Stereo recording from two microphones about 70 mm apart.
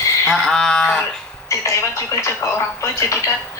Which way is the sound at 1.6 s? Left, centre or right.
Left.